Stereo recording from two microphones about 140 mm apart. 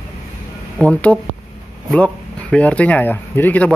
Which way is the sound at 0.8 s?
10° left (ahead or behind).